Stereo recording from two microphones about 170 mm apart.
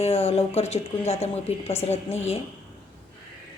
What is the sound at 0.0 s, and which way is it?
Speech, 35° left (ahead or behind).